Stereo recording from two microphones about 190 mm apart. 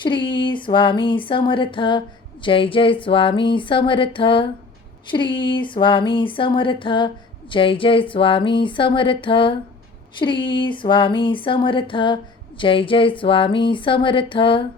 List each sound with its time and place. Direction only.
0.0 s speech: 25° left (ahead or behind)